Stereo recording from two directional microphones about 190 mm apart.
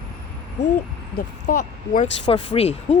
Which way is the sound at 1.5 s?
50° left (ahead or behind).